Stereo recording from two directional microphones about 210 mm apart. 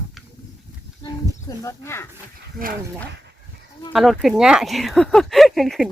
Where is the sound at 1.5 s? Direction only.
15° left (ahead or behind).